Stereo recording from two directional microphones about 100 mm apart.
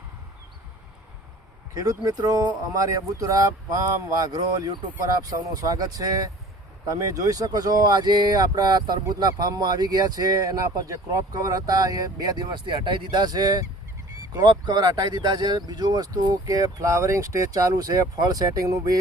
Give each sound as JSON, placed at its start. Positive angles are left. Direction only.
{"t": 1.7, "sound": "speech", "side_deg": -35}